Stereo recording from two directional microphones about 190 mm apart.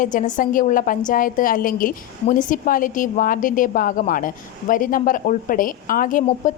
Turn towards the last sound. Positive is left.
turn(degrees=45)  # may be behind; listen again after turning